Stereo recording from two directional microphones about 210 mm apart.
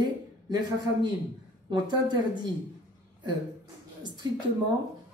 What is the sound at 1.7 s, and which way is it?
Speech, 20° right (ahead or behind).